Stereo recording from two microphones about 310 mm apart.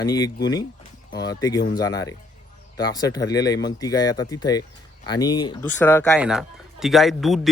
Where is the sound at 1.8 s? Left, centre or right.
Centre.